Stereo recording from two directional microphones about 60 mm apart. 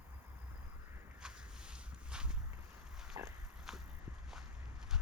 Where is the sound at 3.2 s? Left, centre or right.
Right.